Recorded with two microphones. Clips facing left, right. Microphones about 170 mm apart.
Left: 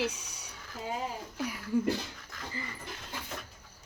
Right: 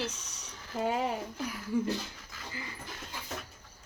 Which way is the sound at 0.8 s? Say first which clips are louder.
Right 6 dB; 70° right (ahead or behind).